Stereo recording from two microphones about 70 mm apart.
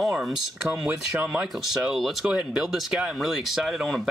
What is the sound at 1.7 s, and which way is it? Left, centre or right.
Speech, centre.